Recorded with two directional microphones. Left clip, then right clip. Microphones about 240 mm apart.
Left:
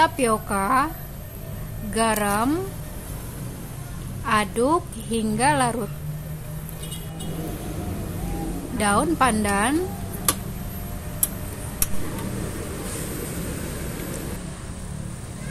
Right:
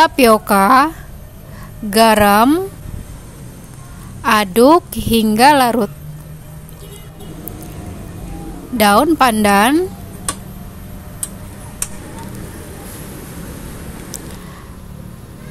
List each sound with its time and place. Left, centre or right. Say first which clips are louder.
0.0 s a woman's voice: right 10 dB; right
4.2 s a woman's voice: right 10 dB; right
8.7 s a woman's voice: right 10 dB; right